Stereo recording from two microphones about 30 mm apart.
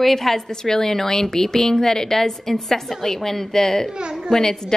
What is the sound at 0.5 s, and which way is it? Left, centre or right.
A woman's voice, left.